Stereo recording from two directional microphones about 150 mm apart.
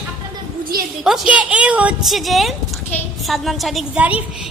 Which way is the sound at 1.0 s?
5° right (ahead or behind).